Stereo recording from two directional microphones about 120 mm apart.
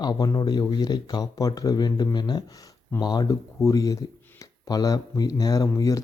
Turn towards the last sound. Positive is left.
turn(degrees=30)  # may be behind; listen again after turning